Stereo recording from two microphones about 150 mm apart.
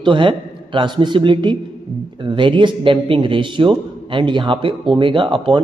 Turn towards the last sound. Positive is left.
turn(degrees=-35)  # may be behind; listen again after turning